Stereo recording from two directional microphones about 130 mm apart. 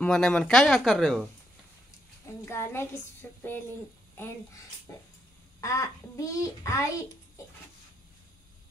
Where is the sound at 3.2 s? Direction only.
15° left (ahead or behind).